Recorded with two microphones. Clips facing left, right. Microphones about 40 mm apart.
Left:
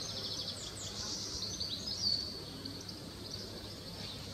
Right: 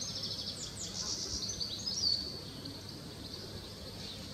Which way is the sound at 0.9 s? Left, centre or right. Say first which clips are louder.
Right 2 dB; left.